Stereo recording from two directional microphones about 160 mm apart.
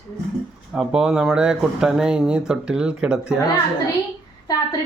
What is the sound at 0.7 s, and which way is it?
A man's voice, 5° right (ahead or behind).